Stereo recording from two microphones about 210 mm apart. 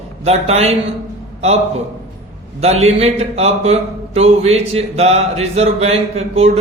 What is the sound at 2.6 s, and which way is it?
A man's voice, 30° right (ahead or behind).